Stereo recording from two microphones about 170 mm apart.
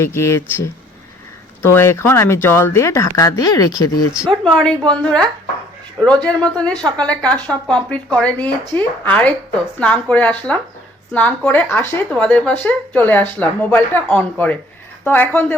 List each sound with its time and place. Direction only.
0.0 s speech: 15° left (ahead or behind)
4.1 s speech: centre (ahead or behind)